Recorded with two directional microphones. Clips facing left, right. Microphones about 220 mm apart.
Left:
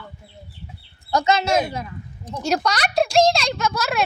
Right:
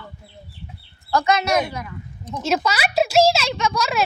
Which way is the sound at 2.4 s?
5° right (ahead or behind).